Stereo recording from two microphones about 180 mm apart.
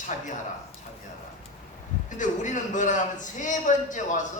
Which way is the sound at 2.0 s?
45° left (ahead or behind).